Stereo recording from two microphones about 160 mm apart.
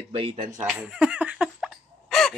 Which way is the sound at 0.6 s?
5° right (ahead or behind).